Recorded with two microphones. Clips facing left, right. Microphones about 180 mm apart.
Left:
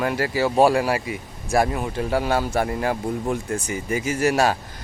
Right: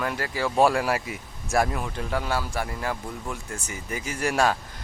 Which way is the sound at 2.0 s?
35° left (ahead or behind).